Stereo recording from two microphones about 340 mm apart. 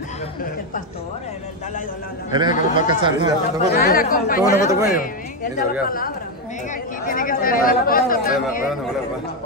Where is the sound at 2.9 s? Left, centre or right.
Centre.